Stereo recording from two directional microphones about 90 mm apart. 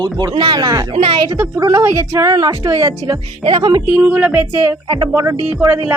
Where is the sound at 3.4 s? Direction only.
60° right (ahead or behind).